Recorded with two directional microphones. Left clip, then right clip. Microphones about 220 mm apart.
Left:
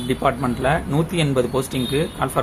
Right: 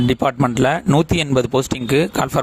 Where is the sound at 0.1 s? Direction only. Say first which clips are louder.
Left 2 dB; 45° right (ahead or behind).